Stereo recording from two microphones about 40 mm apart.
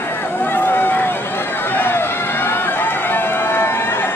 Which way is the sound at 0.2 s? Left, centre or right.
Left.